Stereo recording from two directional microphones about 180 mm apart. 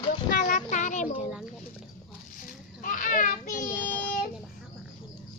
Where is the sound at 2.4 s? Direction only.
45° left (ahead or behind).